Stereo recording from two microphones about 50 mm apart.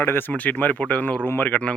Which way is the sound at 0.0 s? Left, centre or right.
Left.